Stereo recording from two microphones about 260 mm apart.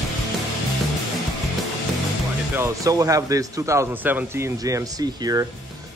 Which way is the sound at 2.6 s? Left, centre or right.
Centre.